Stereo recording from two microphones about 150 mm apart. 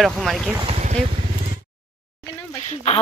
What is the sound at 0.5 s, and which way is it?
Boat, 40° right (ahead or behind).